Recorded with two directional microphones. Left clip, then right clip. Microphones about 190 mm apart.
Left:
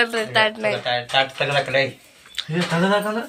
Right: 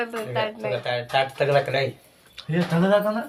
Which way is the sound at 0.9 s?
75° right (ahead or behind).